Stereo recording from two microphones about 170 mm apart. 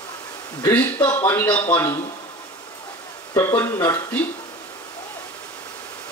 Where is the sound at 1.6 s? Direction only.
10° left (ahead or behind).